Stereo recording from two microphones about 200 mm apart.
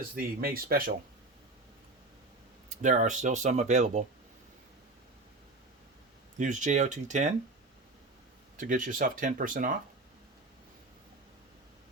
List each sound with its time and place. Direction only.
0.2 s speech: 45° right (ahead or behind)
2.8 s speech: 40° right (ahead or behind)
6.4 s speech: 40° right (ahead or behind)
8.5 s speech: 40° right (ahead or behind)